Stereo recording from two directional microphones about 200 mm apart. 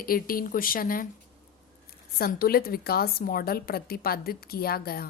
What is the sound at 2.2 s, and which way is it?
A woman's voice, 50° left (ahead or behind).